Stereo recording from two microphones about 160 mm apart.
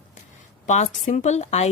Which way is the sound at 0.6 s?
50° left (ahead or behind).